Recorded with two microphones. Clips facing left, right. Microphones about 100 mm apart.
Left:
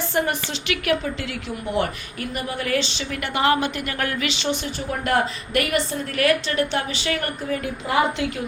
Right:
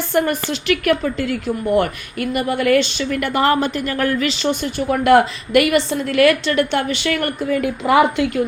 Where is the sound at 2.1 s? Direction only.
70° right (ahead or behind); by 4.7 s 45° right (ahead or behind).